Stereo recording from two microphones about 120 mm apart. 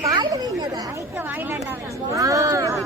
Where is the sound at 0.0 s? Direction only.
30° right (ahead or behind).